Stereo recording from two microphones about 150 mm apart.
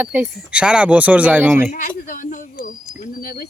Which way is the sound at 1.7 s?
65° left (ahead or behind).